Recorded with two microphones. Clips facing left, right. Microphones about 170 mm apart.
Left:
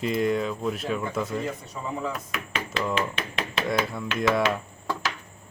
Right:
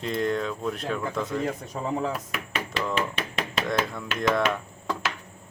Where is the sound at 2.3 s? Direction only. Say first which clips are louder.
Even; 5° right (ahead or behind).